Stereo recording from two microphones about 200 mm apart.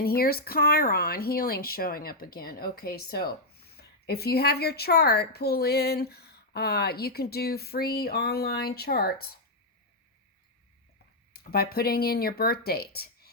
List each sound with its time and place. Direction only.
0.0 s speech: 50° left (ahead or behind)
11.5 s speech: 50° left (ahead or behind)